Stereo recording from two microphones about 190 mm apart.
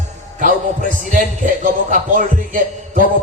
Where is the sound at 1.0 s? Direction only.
45° right (ahead or behind).